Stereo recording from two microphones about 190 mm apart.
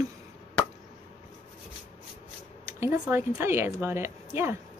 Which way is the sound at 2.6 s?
15° right (ahead or behind).